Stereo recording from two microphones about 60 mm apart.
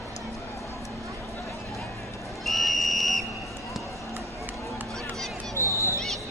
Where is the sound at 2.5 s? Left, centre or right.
Centre.